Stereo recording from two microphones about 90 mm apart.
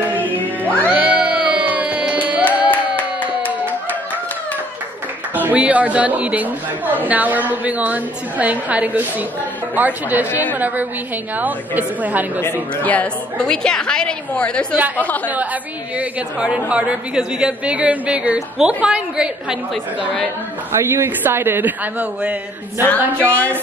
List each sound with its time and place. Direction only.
0.1 s music: 20° left (ahead or behind)
0.8 s music: 15° right (ahead or behind)
2.7 s clapping: 20° left (ahead or behind)
5.3 s a woman's voice: 20° right (ahead or behind)
12.8 s a woman's voice: 15° left (ahead or behind)
16.0 s a woman's voice: 10° right (ahead or behind)
20.7 s a man's voice: 30° right (ahead or behind)
23.2 s a woman's voice: 15° left (ahead or behind)